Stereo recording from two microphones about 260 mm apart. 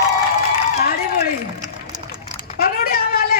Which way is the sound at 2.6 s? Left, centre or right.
Left.